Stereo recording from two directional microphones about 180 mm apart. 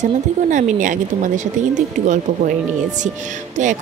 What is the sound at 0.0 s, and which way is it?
A woman's voice, 45° right (ahead or behind).